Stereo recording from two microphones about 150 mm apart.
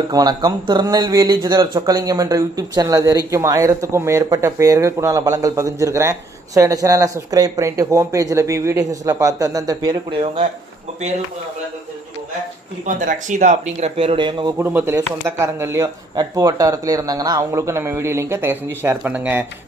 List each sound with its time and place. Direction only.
0.1 s speech: 25° right (ahead or behind)
10.1 s speech: 40° right (ahead or behind)
12.8 s speech: 55° right (ahead or behind); by 14.5 s 30° right (ahead or behind)
14.6 s speech: 15° right (ahead or behind)